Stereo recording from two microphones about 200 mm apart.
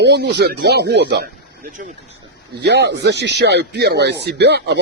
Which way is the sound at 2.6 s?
55° right (ahead or behind).